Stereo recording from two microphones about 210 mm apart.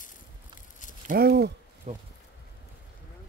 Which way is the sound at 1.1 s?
50° right (ahead or behind).